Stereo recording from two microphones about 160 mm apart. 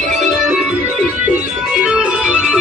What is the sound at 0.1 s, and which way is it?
Music, centre (ahead or behind).